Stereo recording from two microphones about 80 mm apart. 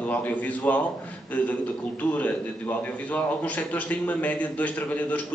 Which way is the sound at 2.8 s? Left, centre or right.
Centre.